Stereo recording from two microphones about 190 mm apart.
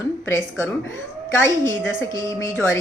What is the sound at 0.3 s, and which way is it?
A woman's voice, 15° left (ahead or behind).